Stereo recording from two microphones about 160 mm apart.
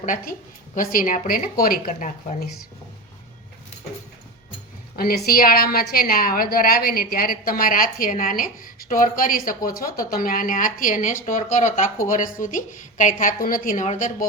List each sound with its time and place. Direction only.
0.0 s a woman's voice: 55° left (ahead or behind)
4.9 s a woman's voice: 70° left (ahead or behind); by 14.3 s 55° left (ahead or behind)